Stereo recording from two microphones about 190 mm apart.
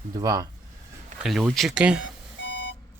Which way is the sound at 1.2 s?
Centre (ahead or behind).